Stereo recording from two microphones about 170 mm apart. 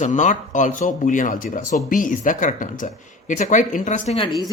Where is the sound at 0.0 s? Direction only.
45° left (ahead or behind).